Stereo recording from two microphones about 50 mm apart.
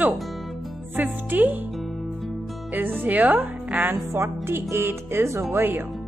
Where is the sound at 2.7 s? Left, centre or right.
Right.